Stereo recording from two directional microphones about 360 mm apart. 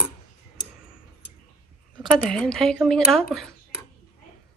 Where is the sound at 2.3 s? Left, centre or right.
Centre.